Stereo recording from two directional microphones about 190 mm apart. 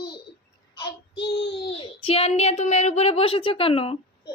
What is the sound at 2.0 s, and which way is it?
A woman's voice, 30° left (ahead or behind).